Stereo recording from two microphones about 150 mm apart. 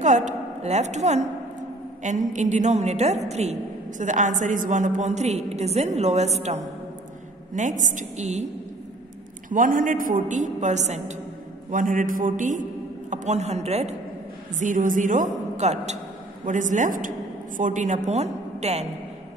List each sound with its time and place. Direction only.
0.0 s a woman's voice: 50° right (ahead or behind)
9.5 s a woman's voice: 65° right (ahead or behind)
11.7 s a woman's voice: 60° right (ahead or behind)
14.6 s a woman's voice: 60° right (ahead or behind)